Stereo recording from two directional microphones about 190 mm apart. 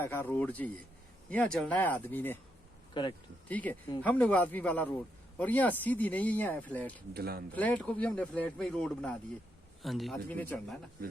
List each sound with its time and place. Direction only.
0.0 s speech: 10° left (ahead or behind)
2.9 s speech: 25° left (ahead or behind)
3.5 s speech: 10° left (ahead or behind)
7.1 s speech: 55° right (ahead or behind)
7.5 s a man's voice: 10° left (ahead or behind)